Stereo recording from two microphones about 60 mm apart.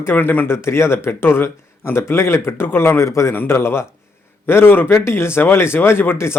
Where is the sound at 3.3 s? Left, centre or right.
Left.